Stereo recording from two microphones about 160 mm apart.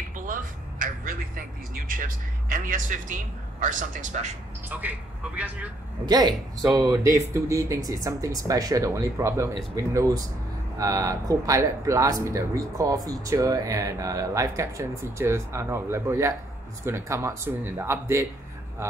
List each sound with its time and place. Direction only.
0.3 s a sound: 55° right (ahead or behind)
4.6 s a man's voice: 10° right (ahead or behind)
6.0 s speech: 25° right (ahead or behind)